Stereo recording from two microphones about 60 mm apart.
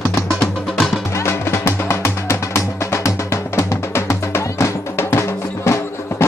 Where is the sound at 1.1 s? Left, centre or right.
Left.